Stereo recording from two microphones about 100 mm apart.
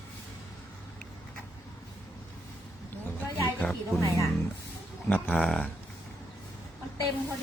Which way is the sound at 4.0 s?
35° left (ahead or behind).